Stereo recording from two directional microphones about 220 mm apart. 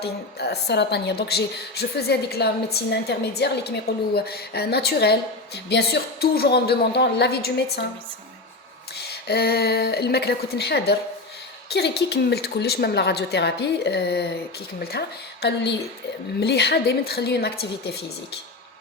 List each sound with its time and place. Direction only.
0.0 s a woman's voice: 45° left (ahead or behind)
9.0 s a woman's voice: 45° left (ahead or behind)